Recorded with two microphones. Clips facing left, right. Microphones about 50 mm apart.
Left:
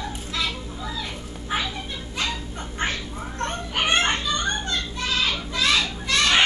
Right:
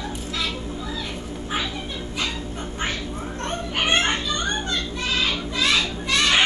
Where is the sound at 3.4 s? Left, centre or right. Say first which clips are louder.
Right 1 dB; centre.